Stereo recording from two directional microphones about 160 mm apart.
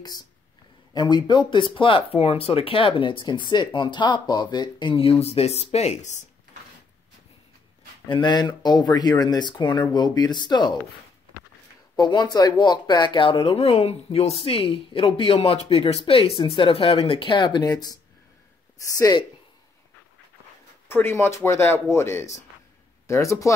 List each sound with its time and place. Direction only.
0.9 s speech: 30° left (ahead or behind); by 6.2 s 45° left (ahead or behind)
8.1 s speech: 25° left (ahead or behind)
12.0 s speech: 25° left (ahead or behind)
18.9 s speech: 20° left (ahead or behind)
20.9 s speech: 15° left (ahead or behind)